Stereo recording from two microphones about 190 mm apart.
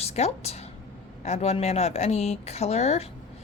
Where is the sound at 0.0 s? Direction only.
35° left (ahead or behind).